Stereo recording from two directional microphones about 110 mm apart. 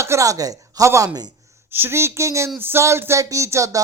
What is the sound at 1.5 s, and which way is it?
A man's voice, 20° right (ahead or behind).